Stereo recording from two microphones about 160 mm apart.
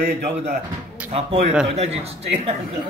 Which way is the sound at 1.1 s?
40° right (ahead or behind).